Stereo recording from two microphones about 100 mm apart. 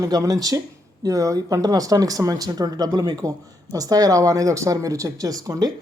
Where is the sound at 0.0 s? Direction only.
35° right (ahead or behind).